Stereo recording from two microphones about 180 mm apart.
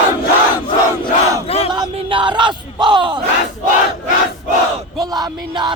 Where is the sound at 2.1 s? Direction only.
25° right (ahead or behind).